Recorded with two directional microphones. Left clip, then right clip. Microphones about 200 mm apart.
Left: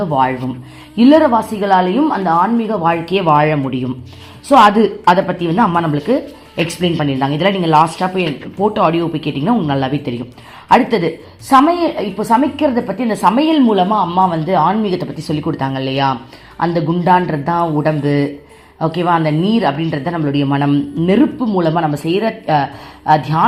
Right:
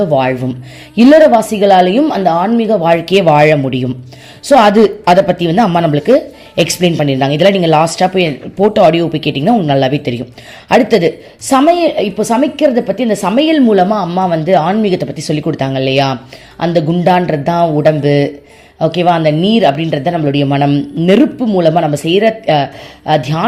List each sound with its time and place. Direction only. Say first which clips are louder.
0.0 s a man's voice: right 3 dB; 40° right (ahead or behind)